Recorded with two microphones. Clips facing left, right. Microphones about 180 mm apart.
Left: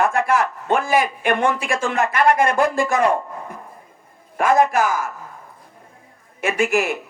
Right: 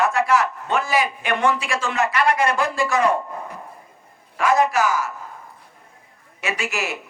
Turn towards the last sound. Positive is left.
turn(degrees=50)  # may be behind; listen again after turning